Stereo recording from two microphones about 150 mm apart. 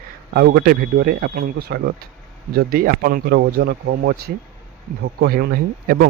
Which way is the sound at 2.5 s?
75° right (ahead or behind).